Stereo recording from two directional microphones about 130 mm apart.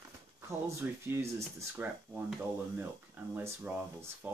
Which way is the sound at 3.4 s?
10° right (ahead or behind).